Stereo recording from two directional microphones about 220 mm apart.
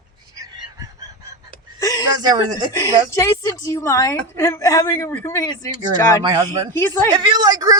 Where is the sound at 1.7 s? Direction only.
15° left (ahead or behind).